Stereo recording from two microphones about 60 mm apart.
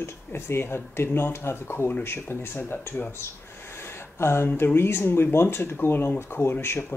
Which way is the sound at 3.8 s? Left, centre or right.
Left.